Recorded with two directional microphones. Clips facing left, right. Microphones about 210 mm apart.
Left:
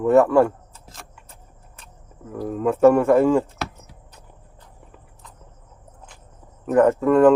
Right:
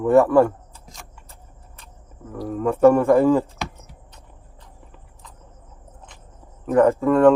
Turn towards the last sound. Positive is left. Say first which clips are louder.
# even
turn(degrees=0)  # may be behind; listen again after turning